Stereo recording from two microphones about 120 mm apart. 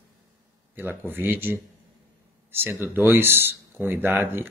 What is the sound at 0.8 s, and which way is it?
Speech, 15° right (ahead or behind).